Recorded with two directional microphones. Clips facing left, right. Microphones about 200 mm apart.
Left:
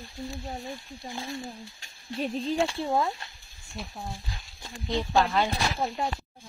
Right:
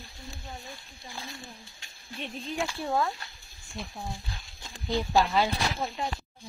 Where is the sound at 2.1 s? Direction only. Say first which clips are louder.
Left 7 dB; 35° left (ahead or behind).